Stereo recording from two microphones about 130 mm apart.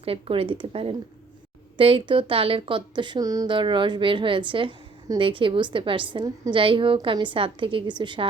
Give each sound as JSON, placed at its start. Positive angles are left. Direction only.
{"t": 0.0, "sound": "a woman's voice", "side_deg": -45}